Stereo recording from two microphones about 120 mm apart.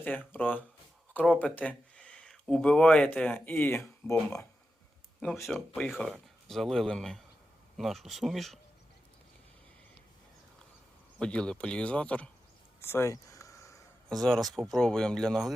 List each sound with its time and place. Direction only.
0.0 s speech: 15° left (ahead or behind)
5.2 s speech: centre (ahead or behind)
11.2 s speech: 10° left (ahead or behind)
12.8 s a sound: 20° left (ahead or behind)
14.1 s speech: 5° left (ahead or behind)